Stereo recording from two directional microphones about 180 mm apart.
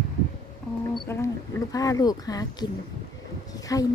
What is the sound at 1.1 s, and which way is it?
Speech, 20° left (ahead or behind).